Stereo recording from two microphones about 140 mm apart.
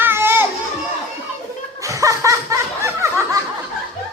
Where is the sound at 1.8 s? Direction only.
25° right (ahead or behind).